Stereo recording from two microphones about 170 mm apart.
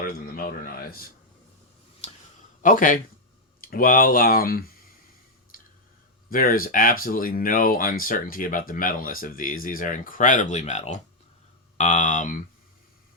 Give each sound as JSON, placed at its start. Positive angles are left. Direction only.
{"t": 0.0, "sound": "a man's voice", "side_deg": 55}
{"t": 2.0, "sound": "a sound", "side_deg": 40}
{"t": 2.6, "sound": "speech", "side_deg": 50}
{"t": 5.5, "sound": "squish", "side_deg": 55}
{"t": 6.3, "sound": "speech", "side_deg": 55}